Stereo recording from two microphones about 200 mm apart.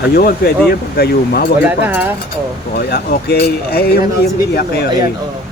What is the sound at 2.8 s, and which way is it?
Speech, 50° left (ahead or behind).